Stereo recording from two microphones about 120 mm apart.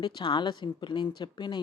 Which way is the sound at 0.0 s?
40° left (ahead or behind).